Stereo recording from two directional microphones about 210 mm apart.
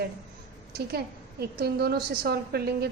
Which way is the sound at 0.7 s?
50° right (ahead or behind).